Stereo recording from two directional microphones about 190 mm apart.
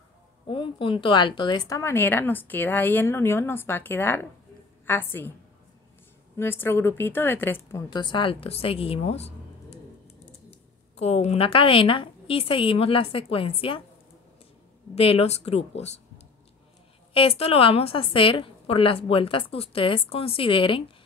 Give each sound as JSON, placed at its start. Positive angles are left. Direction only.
{"t": 0.5, "sound": "speech", "side_deg": 25}
{"t": 6.3, "sound": "speech", "side_deg": 10}
{"t": 10.5, "sound": "a woman's voice", "side_deg": 35}
{"t": 15.0, "sound": "speech", "side_deg": 30}
{"t": 17.1, "sound": "a woman's voice", "side_deg": 30}